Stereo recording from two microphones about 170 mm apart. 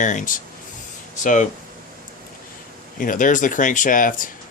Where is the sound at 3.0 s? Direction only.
50° left (ahead or behind).